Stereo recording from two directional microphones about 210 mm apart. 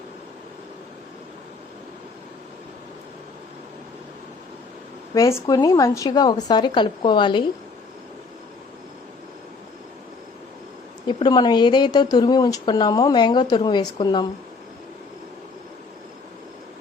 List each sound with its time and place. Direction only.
5.1 s a woman's voice: 15° left (ahead or behind)
11.0 s a woman's voice: 20° left (ahead or behind)